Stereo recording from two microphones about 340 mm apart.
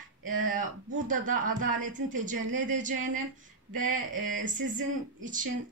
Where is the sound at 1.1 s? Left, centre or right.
Right.